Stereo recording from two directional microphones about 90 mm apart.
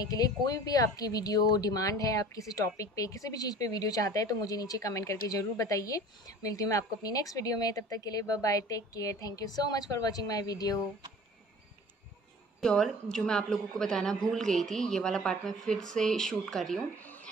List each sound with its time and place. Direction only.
0.0 s speech: 45° left (ahead or behind)
12.5 s a woman's voice: 5° left (ahead or behind)
17.0 s a sound: 20° left (ahead or behind)